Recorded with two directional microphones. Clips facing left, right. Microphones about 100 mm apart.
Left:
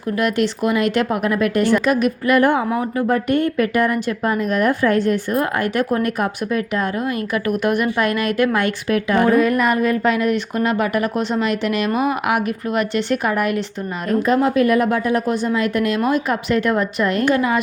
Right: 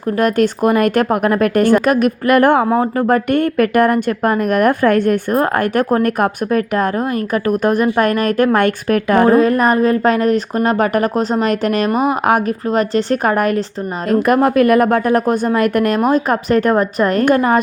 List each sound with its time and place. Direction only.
0.2 s speech: 45° right (ahead or behind)
7.6 s speech: 40° right (ahead or behind)
9.2 s speech: 35° right (ahead or behind)
14.3 s speech: 55° right (ahead or behind)